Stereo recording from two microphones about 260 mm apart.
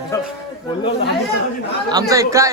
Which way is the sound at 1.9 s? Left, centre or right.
Centre.